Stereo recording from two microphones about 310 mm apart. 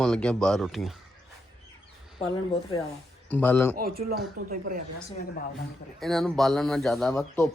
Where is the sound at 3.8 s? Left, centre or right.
Right.